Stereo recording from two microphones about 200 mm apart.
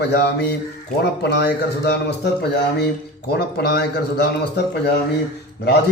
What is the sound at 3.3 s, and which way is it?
A man's voice, 55° left (ahead or behind).